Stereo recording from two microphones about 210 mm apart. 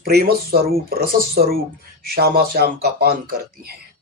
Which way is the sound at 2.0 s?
45° right (ahead or behind).